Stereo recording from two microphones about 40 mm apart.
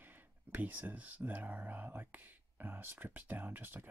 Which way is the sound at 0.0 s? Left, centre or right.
Right.